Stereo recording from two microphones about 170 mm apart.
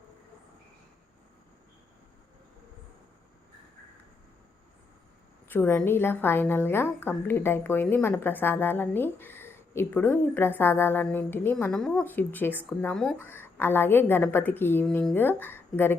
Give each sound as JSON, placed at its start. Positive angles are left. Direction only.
{"t": 5.5, "sound": "a woman's voice", "side_deg": 10}